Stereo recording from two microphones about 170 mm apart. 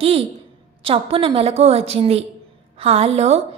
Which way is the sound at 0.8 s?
35° right (ahead or behind).